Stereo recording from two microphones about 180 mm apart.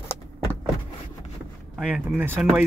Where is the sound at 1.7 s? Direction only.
5° right (ahead or behind).